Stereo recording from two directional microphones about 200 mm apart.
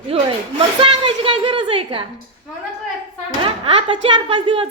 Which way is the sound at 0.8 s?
25° right (ahead or behind).